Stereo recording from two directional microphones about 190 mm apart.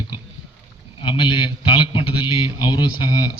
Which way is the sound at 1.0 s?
25° left (ahead or behind).